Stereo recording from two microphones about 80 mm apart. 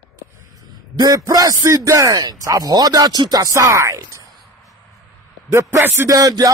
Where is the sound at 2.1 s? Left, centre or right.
Right.